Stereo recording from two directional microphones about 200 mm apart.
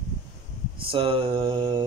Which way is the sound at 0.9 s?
25° right (ahead or behind).